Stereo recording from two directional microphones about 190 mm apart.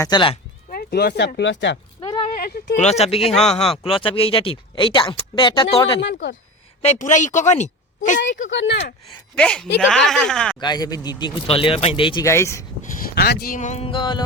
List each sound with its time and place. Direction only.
0.0 s speech: 25° left (ahead or behind)
0.7 s speech: 55° left (ahead or behind)
2.0 s a sound: 25° left (ahead or behind)
2.4 s speech: 55° left (ahead or behind)
2.7 s speech: 35° left (ahead or behind)
6.0 s speech: 65° left (ahead or behind)
6.8 s speech: 40° left (ahead or behind)
8.4 s speech: 70° left (ahead or behind)
9.3 s speech: 5° left (ahead or behind)
10.6 s speech: 20° left (ahead or behind)
12.2 s speech: 15° left (ahead or behind)
12.8 s speech: 55° left (ahead or behind); by 14.2 s 25° left (ahead or behind)